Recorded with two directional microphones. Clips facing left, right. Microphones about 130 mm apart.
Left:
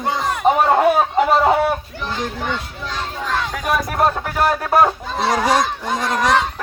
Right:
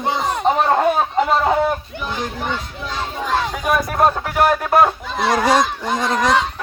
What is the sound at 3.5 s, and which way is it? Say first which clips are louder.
Speech: right 1 dB; 5° right (ahead or behind).